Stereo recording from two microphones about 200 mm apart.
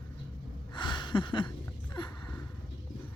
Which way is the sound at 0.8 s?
25° left (ahead or behind).